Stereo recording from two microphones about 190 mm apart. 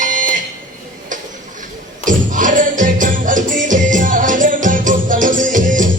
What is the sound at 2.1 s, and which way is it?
Music, 45° right (ahead or behind).